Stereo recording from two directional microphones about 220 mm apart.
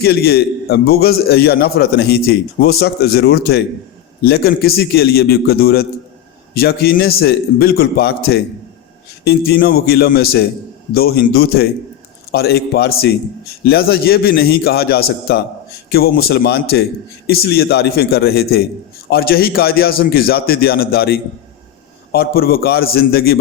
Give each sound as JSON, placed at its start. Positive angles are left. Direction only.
{"t": 0.0, "sound": "a man's voice", "side_deg": 45}